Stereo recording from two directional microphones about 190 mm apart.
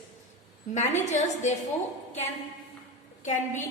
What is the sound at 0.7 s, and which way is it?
Speech, 40° left (ahead or behind).